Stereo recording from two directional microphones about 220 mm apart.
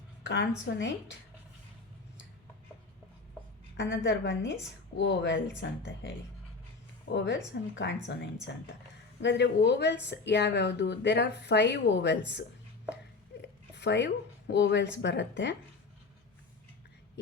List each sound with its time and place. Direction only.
0.2 s speech: 55° left (ahead or behind)
3.8 s speech: 55° left (ahead or behind)
13.4 s a sound: 50° left (ahead or behind)
14.5 s speech: 55° left (ahead or behind)